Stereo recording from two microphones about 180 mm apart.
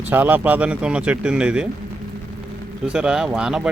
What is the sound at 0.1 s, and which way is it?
Speech, 10° right (ahead or behind).